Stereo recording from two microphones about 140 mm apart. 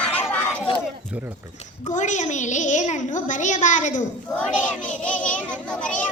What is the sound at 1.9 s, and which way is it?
A woman's voice, 60° left (ahead or behind).